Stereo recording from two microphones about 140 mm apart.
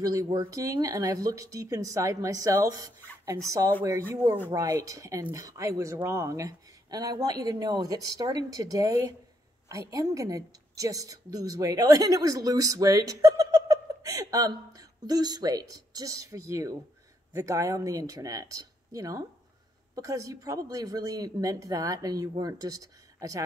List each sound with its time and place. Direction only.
0.0 s speech: 25° right (ahead or behind)